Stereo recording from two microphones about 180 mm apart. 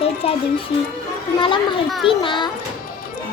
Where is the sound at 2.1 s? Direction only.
30° left (ahead or behind).